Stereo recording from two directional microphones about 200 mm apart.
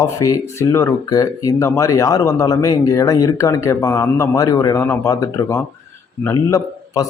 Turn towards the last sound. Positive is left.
turn(degrees=15)  # may be behind; listen again after turning